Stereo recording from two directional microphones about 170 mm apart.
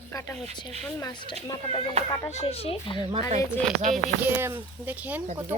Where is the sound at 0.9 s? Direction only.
25° left (ahead or behind).